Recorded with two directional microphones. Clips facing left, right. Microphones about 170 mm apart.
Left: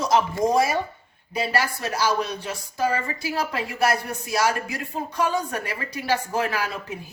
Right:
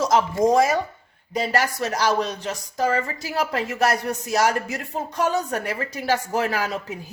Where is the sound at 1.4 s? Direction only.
40° right (ahead or behind).